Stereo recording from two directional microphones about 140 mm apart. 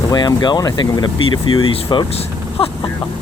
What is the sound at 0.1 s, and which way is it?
Speech, 30° left (ahead or behind).